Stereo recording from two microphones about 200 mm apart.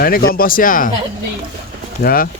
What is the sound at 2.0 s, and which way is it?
Speech, 45° left (ahead or behind).